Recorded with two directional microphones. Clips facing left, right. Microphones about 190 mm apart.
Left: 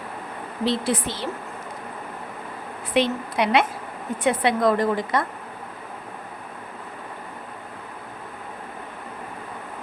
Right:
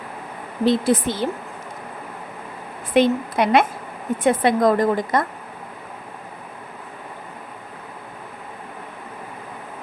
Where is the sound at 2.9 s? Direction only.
50° right (ahead or behind).